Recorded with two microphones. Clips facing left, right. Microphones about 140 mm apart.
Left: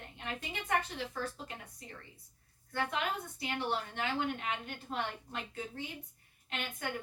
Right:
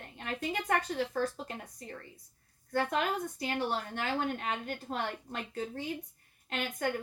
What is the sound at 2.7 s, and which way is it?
A woman's voice, 40° right (ahead or behind).